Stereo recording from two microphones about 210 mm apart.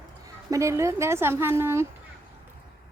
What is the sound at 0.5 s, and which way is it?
A woman's voice, 15° right (ahead or behind).